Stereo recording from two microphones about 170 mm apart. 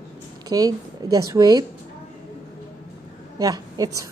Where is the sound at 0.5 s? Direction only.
20° right (ahead or behind).